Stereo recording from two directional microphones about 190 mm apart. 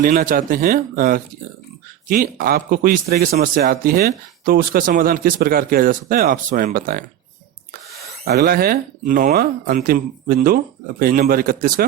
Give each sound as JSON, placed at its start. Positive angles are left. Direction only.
{"t": 0.0, "sound": "speech", "side_deg": -50}
{"t": 8.2, "sound": "speech", "side_deg": -55}